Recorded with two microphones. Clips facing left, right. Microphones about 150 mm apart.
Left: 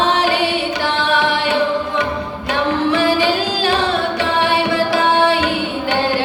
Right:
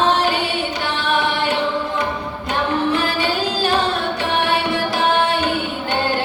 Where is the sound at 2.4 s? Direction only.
80° left.